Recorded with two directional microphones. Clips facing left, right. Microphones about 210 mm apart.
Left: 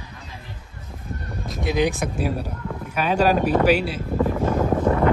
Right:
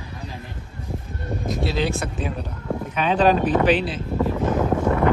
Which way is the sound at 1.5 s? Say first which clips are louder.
Left 4 dB; 15° left (ahead or behind).